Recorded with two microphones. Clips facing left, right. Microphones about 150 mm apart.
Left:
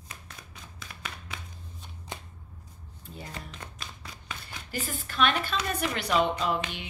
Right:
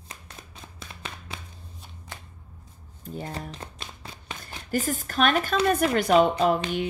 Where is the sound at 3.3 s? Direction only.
35° right (ahead or behind).